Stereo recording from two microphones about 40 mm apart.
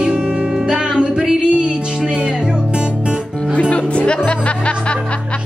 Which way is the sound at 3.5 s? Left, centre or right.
Left.